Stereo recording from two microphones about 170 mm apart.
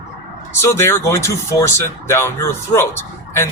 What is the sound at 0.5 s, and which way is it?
Speech, 15° left (ahead or behind).